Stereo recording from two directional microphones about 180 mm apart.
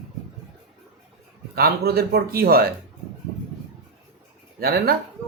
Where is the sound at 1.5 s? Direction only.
60° right (ahead or behind).